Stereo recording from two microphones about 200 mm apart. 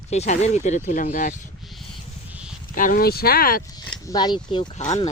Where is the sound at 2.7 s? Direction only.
45° left (ahead or behind).